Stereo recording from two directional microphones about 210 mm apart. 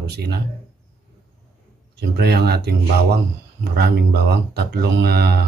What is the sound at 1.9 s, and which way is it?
Speech, 50° right (ahead or behind).